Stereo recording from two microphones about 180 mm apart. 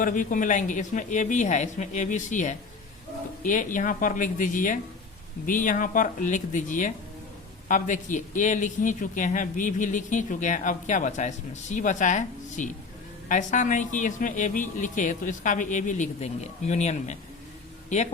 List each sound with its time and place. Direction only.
0.0 s a man's voice: 50° left (ahead or behind)